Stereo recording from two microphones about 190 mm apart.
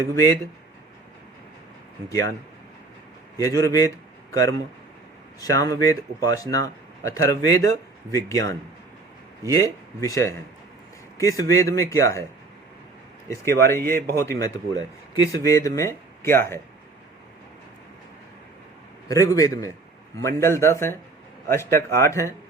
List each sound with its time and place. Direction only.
2.0 s a man's voice: 15° left (ahead or behind)
3.3 s a man's voice: 15° left (ahead or behind)
13.2 s a man's voice: 15° left (ahead or behind)
19.0 s a man's voice: 15° left (ahead or behind)